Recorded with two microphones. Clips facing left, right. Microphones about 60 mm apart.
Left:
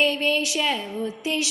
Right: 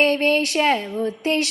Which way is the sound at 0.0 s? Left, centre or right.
Right.